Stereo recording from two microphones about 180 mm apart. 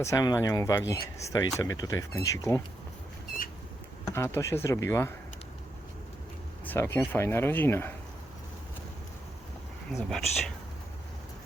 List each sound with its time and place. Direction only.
0.0 s speech: 20° left (ahead or behind)
4.4 s speech: 15° left (ahead or behind)
6.7 s speech: 15° left (ahead or behind)
9.9 s speech: centre (ahead or behind)